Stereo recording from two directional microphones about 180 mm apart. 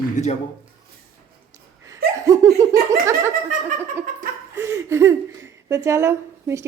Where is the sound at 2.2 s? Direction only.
20° right (ahead or behind).